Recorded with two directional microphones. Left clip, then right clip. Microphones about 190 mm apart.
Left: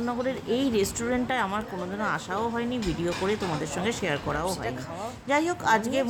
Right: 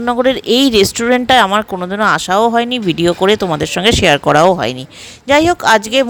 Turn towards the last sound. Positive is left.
turn(degrees=-45)  # may be behind; listen again after turning